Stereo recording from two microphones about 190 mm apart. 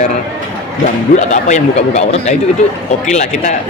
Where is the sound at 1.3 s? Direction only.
40° left (ahead or behind).